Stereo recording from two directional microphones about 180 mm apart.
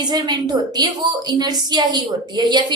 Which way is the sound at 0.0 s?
20° right (ahead or behind).